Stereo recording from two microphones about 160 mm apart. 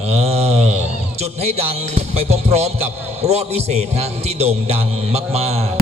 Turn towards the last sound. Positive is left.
turn(degrees=-40)  # may be behind; listen again after turning